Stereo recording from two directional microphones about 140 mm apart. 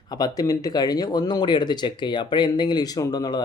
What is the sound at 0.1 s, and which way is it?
Speech, 30° left (ahead or behind).